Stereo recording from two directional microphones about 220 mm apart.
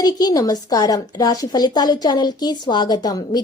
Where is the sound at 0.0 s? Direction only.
15° left (ahead or behind).